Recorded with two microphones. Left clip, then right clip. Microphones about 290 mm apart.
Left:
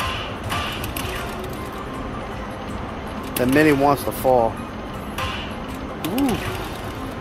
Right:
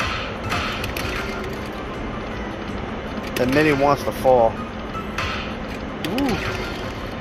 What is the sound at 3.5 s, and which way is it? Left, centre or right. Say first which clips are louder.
Speech: left 1 dB; centre.